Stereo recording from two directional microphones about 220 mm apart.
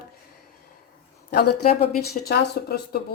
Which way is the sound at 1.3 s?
50° left (ahead or behind).